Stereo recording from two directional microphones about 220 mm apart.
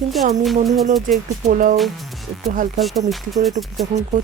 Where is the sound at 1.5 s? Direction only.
35° right (ahead or behind).